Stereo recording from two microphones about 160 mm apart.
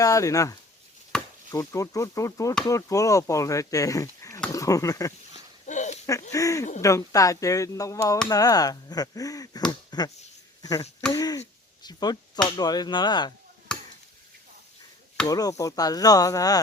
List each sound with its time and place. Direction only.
0.0 s speech: 20° left (ahead or behind)
1.1 s chop: 5° left (ahead or behind)
1.5 s speech: 20° left (ahead or behind)
4.5 s a sound: 20° left (ahead or behind)
5.3 s a sound: 50° left (ahead or behind)
6.3 s speech: 20° left (ahead or behind)
15.3 s speech: 20° left (ahead or behind)